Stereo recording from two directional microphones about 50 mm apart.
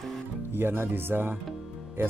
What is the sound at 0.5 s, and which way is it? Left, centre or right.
Speech, right.